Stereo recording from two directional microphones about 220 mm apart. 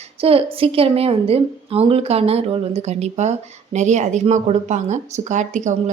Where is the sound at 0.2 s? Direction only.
25° right (ahead or behind).